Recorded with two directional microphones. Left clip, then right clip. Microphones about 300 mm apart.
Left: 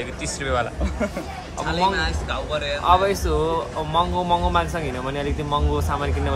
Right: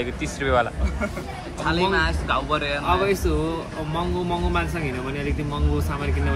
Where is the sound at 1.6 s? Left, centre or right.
Centre.